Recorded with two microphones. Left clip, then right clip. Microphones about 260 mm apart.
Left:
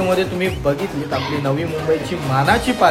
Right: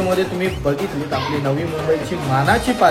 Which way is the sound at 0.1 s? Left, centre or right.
Centre.